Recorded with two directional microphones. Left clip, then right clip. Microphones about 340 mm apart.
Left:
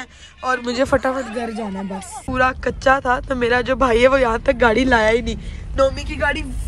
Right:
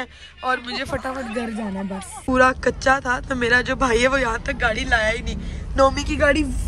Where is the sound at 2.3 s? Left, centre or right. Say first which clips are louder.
Right 2 dB; centre.